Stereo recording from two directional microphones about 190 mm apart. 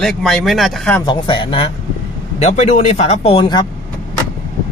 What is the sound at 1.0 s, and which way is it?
Speech, 25° left (ahead or behind).